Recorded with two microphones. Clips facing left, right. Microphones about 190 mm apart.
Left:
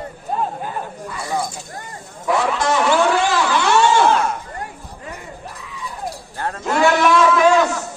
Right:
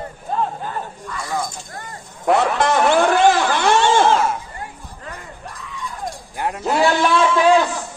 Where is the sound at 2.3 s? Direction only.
60° right (ahead or behind).